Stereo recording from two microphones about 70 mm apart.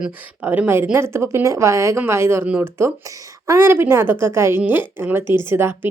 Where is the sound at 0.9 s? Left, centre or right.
Right.